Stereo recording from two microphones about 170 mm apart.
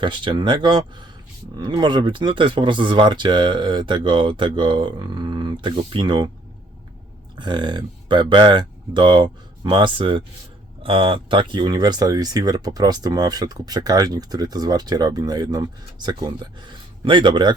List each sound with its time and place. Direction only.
0.0 s speech: 30° right (ahead or behind)
7.3 s speech: 25° right (ahead or behind)